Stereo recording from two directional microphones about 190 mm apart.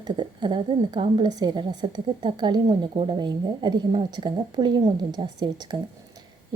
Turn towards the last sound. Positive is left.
turn(degrees=-20)  # may be behind; listen again after turning